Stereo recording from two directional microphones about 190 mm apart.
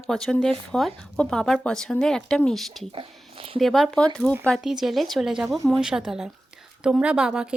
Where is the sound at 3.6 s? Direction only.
Centre (ahead or behind).